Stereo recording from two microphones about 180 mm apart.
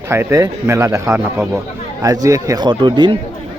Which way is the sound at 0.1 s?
15° right (ahead or behind).